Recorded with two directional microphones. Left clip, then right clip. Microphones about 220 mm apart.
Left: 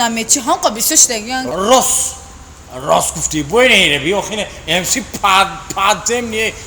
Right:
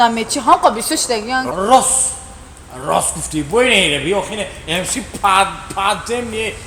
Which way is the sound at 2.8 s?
40° left (ahead or behind).